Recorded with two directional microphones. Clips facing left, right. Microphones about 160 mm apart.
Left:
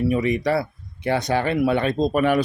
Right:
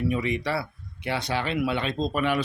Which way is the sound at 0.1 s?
45° left (ahead or behind).